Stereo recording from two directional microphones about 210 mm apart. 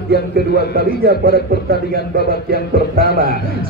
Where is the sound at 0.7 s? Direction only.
45° right (ahead or behind).